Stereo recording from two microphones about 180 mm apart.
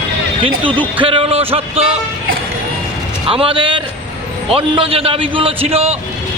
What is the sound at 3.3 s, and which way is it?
A man's voice, 30° right (ahead or behind).